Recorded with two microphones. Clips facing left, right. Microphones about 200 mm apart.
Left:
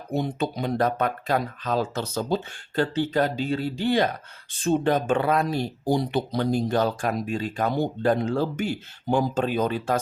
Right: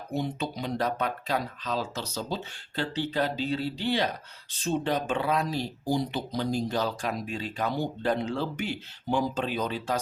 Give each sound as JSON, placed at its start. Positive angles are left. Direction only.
{"t": 0.1, "sound": "speech", "side_deg": 50}